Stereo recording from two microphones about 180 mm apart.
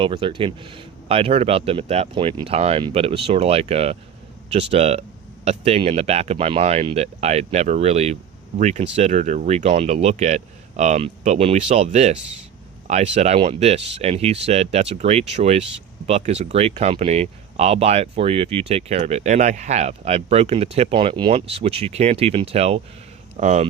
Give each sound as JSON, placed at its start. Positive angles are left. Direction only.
{"t": 0.0, "sound": "speech", "side_deg": -30}